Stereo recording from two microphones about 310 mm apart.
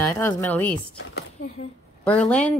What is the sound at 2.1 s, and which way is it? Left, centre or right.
Speech, centre.